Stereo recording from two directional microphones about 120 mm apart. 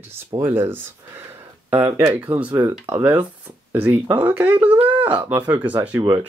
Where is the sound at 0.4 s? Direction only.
20° right (ahead or behind).